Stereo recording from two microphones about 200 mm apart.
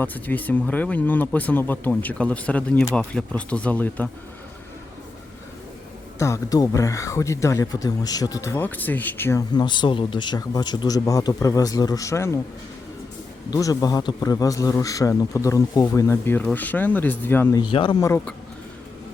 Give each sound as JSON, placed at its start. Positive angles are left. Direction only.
{"t": 0.0, "sound": "speech", "side_deg": 10}
{"t": 6.1, "sound": "speech", "side_deg": 15}
{"t": 13.5, "sound": "speech", "side_deg": 15}
{"t": 18.0, "sound": "speech", "side_deg": 15}